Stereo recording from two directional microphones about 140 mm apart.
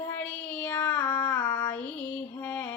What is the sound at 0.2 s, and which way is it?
Child singing, 10° left (ahead or behind).